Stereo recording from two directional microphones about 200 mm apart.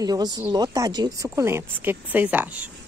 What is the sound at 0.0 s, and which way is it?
Speech, 20° right (ahead or behind).